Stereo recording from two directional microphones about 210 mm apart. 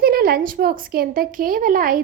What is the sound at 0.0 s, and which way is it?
A woman's voice, 45° right (ahead or behind).